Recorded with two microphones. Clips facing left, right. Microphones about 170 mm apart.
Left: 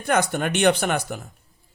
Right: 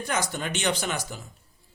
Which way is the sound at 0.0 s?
60° left (ahead or behind).